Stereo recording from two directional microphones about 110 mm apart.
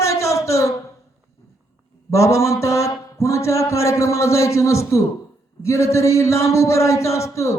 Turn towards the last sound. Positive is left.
turn(degrees=25)  # may be behind; listen again after turning